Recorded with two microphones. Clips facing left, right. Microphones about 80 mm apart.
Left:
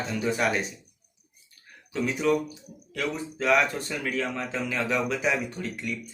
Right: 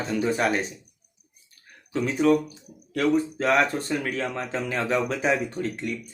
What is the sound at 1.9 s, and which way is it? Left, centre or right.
Speech, right.